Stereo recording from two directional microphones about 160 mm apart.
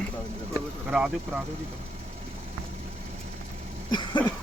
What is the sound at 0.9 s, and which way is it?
Speech, 5° right (ahead or behind).